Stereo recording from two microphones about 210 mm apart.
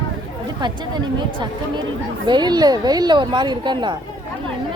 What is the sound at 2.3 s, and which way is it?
Speech, 20° right (ahead or behind).